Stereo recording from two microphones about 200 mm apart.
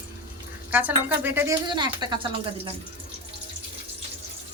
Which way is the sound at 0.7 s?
10° right (ahead or behind).